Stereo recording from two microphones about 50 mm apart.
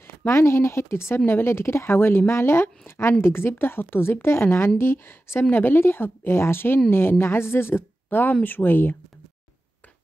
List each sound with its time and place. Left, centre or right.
0.3 s a woman's voice: left